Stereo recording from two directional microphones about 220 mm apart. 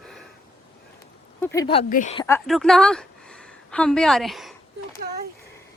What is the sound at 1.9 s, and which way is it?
Speech, 35° left (ahead or behind).